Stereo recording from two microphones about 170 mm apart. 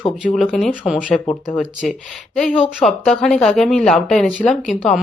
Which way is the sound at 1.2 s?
25° left (ahead or behind).